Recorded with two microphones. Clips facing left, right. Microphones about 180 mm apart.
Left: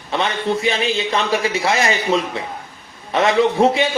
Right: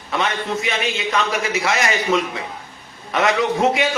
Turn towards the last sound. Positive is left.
turn(degrees=30)  # may be behind; listen again after turning